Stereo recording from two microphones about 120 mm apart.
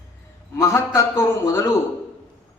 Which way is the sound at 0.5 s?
20° left (ahead or behind).